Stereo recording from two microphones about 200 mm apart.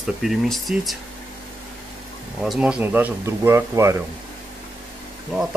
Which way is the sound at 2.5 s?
5° right (ahead or behind).